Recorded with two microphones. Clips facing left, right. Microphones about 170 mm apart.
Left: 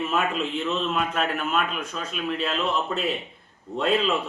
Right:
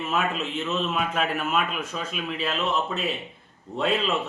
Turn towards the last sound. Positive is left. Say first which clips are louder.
# left 2 dB
turn(degrees=0)  # may be behind; listen again after turning